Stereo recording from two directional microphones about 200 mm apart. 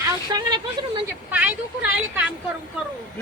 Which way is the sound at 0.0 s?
20° right (ahead or behind).